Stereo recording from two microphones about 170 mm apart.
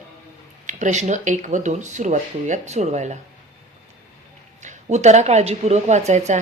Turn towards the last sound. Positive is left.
turn(degrees=-40)  # may be behind; listen again after turning